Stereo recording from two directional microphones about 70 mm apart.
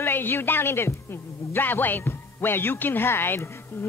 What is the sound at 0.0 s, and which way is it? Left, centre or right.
Speech, left.